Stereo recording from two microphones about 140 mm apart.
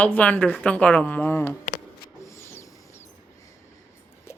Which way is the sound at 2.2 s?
20° left (ahead or behind).